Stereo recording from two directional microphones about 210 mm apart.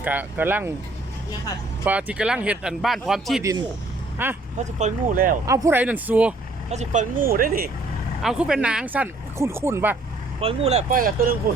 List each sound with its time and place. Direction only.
0.0 s speech: 10° right (ahead or behind)
1.8 s speech: 5° right (ahead or behind)
3.4 s speech: 15° right (ahead or behind)
4.5 s speech: 35° right (ahead or behind)
5.5 s speech: 15° right (ahead or behind)
6.7 s speech: 35° right (ahead or behind)
8.2 s speech: centre (ahead or behind)
10.4 s speech: 30° right (ahead or behind)